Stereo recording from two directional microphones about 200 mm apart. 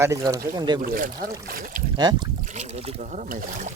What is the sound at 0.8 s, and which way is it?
Speech, 45° right (ahead or behind).